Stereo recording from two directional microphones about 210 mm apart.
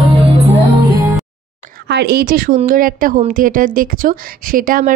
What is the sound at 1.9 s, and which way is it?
Speech, 50° right (ahead or behind).